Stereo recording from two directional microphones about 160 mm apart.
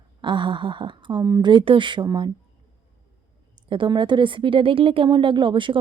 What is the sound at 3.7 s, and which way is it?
Speech, 30° right (ahead or behind).